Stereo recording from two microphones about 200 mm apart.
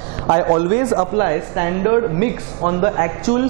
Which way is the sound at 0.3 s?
25° right (ahead or behind).